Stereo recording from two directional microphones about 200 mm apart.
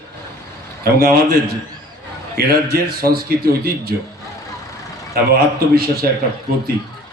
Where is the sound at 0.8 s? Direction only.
50° right (ahead or behind).